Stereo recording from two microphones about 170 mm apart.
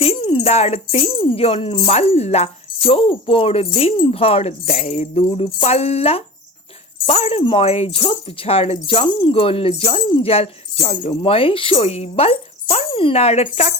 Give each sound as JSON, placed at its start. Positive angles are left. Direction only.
{"t": 0.0, "sound": "speech", "side_deg": 35}